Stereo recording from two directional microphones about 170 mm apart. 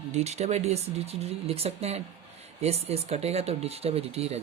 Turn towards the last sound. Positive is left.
turn(degrees=-35)  # may be behind; listen again after turning